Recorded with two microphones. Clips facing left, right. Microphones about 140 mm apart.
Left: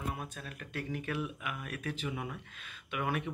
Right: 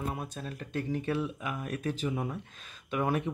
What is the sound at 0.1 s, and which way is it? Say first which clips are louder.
Speech: right 4 dB; 30° right (ahead or behind).